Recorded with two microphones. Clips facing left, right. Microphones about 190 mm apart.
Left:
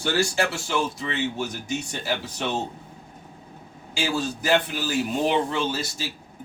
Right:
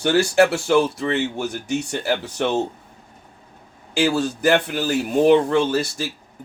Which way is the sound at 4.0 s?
60° right (ahead or behind).